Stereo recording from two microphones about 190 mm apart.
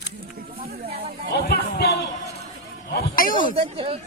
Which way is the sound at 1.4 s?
55° left (ahead or behind).